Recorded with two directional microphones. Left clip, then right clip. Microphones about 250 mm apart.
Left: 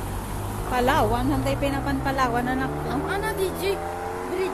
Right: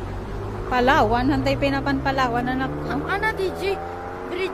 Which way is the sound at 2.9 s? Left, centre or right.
Right.